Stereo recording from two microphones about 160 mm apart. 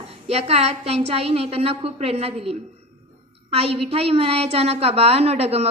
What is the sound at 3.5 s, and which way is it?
A woman's voice, 35° right (ahead or behind).